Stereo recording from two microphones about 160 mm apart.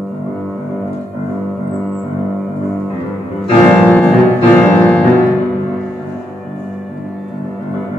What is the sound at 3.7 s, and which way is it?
Music, 10° left (ahead or behind).